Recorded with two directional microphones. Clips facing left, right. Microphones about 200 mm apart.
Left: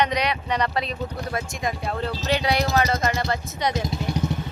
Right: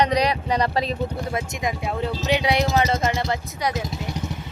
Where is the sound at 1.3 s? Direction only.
20° right (ahead or behind).